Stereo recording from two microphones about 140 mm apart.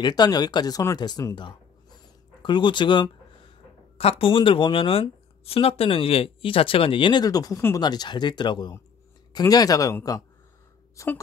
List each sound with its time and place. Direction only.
0.0 s speech: 30° left (ahead or behind)
4.0 s speech: 45° left (ahead or behind); by 11.1 s 20° left (ahead or behind)